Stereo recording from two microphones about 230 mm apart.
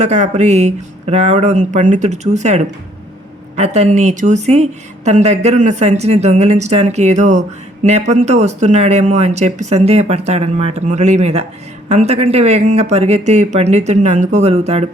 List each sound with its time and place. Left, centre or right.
0.0 s speech: right
3.6 s speech: right